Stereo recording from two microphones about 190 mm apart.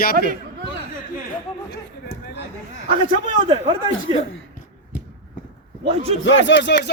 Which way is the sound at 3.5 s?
25° right (ahead or behind).